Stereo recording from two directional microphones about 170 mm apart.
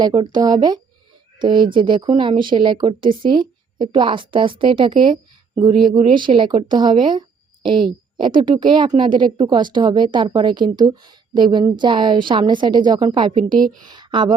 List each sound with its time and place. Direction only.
0.0 s a woman's voice: 30° right (ahead or behind)